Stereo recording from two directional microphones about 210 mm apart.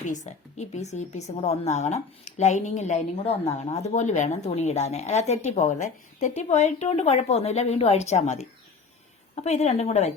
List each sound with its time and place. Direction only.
0.0 s a woman's voice: 35° left (ahead or behind)